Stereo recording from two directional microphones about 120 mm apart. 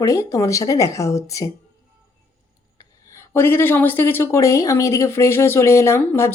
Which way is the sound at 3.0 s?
25° left (ahead or behind).